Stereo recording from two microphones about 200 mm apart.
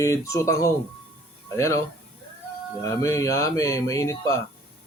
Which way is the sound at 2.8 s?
15° left (ahead or behind).